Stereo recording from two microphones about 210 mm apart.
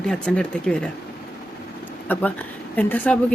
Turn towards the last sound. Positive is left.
turn(degrees=5)  # may be behind; listen again after turning